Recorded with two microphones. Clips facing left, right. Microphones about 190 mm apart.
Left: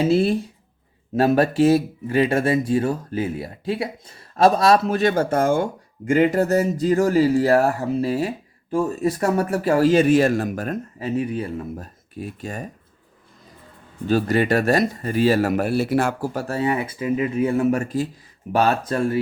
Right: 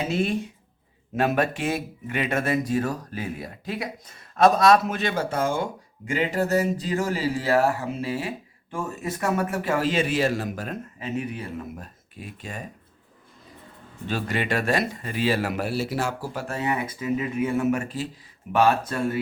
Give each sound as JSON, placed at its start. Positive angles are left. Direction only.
{"t": 0.1, "sound": "speech", "side_deg": 35}
{"t": 11.0, "sound": "speech", "side_deg": 30}
{"t": 14.1, "sound": "speech", "side_deg": 40}